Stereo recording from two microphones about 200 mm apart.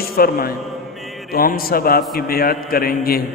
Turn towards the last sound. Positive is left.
turn(degrees=50)  # may be behind; listen again after turning